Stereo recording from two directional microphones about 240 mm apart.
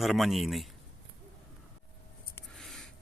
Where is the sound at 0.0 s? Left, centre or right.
Centre.